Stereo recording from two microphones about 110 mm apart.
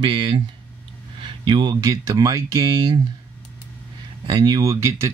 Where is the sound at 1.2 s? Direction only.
45° right (ahead or behind).